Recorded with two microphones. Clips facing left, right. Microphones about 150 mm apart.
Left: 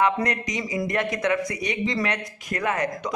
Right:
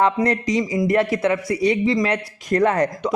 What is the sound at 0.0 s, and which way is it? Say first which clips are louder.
A man's voice: right 4 dB; 30° right (ahead or behind).